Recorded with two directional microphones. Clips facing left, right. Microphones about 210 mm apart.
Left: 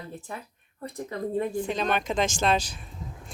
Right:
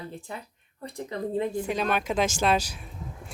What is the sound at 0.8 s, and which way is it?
Speech, 30° right (ahead or behind).